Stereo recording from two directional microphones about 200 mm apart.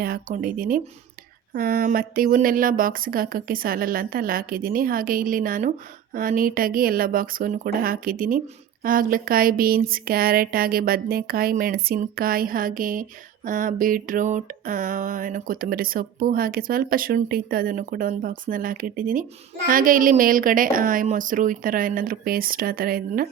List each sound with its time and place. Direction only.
0.0 s speech: 45° right (ahead or behind)